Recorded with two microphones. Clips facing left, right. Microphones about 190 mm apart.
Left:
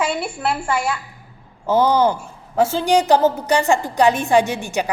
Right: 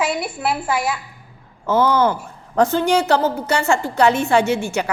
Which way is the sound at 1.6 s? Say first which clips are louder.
Left 1 dB; 15° left (ahead or behind).